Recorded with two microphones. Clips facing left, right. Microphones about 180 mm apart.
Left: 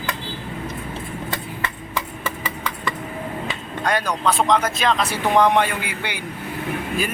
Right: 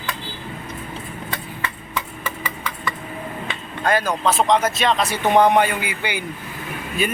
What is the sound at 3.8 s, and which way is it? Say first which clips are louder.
Speech: right 2 dB; 5° right (ahead or behind).